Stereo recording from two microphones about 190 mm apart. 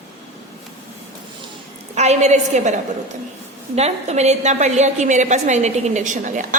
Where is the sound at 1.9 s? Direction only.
35° right (ahead or behind).